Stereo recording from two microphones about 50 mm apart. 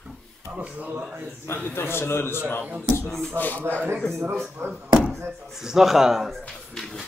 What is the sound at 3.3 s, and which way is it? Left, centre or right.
Speech, left.